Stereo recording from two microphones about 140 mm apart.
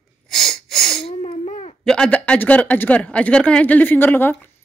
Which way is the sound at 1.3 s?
60° left (ahead or behind).